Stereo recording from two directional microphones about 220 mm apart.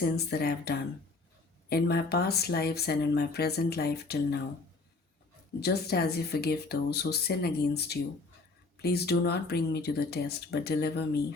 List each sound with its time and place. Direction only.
0.2 s speech: 45° left (ahead or behind)
5.5 s speech: 45° left (ahead or behind)